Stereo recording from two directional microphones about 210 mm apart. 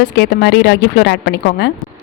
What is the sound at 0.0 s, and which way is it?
Speech, 55° left (ahead or behind).